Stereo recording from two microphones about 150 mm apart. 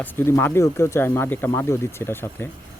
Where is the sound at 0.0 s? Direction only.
15° left (ahead or behind).